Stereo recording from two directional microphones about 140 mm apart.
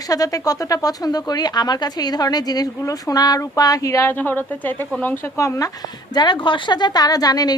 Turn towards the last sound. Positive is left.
turn(degrees=25)  # may be behind; listen again after turning